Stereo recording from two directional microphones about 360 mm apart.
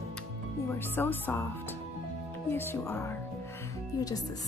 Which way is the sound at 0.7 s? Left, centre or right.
Centre.